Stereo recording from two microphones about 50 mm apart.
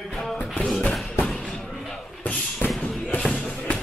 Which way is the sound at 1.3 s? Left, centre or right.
Centre.